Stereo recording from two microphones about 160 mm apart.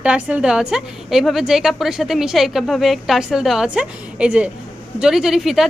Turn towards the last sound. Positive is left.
turn(degrees=0)  # may be behind; listen again after turning